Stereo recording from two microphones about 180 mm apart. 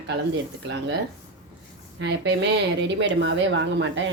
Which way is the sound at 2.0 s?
75° right (ahead or behind).